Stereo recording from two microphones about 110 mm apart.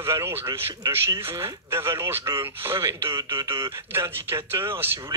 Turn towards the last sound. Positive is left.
turn(degrees=-25)  # may be behind; listen again after turning